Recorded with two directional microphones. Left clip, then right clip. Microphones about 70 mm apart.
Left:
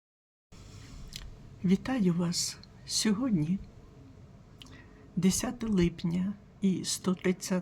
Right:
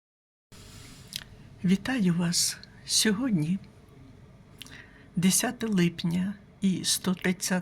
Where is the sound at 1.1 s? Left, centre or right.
Centre.